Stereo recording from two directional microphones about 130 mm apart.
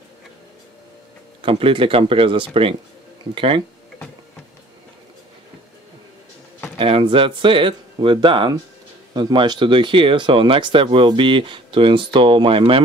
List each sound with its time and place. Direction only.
1.4 s speech: 45° right (ahead or behind)
6.8 s speech: 40° right (ahead or behind)